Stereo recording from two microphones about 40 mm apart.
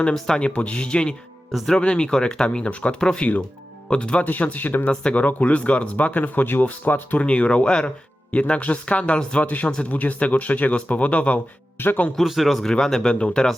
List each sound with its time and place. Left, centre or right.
0.1 s speech: left
4.3 s speech: left
4.9 s speech: left
7.2 s speech: left
9.4 s speech: left
11.8 s speech: left
12.2 s a man's voice: centre
13.0 s speech: left